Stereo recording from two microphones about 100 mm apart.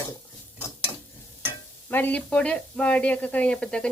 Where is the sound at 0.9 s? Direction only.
45° left (ahead or behind).